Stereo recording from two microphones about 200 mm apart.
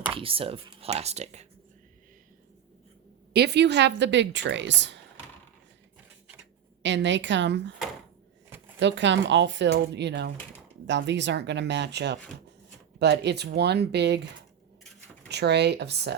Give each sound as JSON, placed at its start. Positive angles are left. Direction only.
{"t": 0.1, "sound": "speech", "side_deg": -25}
{"t": 3.3, "sound": "speech", "side_deg": -55}
{"t": 6.8, "sound": "speech", "side_deg": -65}
{"t": 8.8, "sound": "speech", "side_deg": -65}
{"t": 15.3, "sound": "speech", "side_deg": -55}